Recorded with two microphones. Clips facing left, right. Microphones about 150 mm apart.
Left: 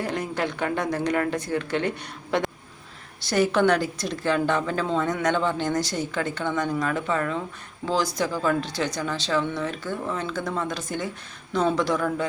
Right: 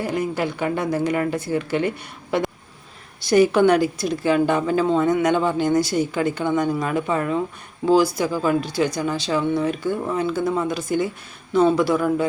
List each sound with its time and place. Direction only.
0.0 s a woman's voice: 5° right (ahead or behind)